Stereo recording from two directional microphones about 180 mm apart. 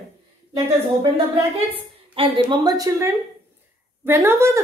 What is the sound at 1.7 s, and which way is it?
A woman's voice, 30° right (ahead or behind).